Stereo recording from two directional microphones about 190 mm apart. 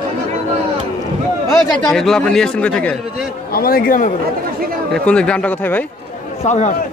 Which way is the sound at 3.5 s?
50° left (ahead or behind).